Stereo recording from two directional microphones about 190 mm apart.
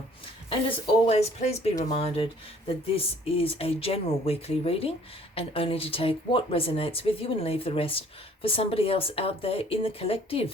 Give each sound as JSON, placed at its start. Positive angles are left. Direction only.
{"t": 1.0, "sound": "speech", "side_deg": 35}